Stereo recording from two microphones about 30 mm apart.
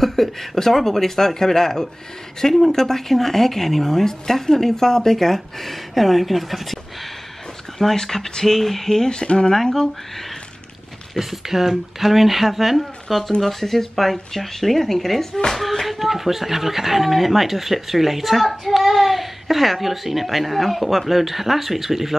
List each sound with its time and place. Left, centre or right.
0.0 s a woman's voice: centre
7.9 s a woman's voice: centre
9.1 s speech: left
11.1 s a child's voice: centre
15.9 s a child's voice: centre